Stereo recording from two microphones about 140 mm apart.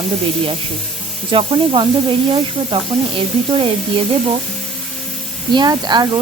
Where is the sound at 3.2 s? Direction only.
40° right (ahead or behind).